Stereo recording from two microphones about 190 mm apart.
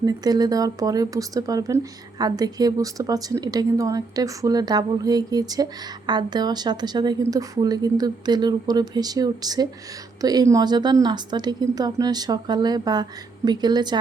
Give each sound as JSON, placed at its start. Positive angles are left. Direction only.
{"t": 0.0, "sound": "speech", "side_deg": -20}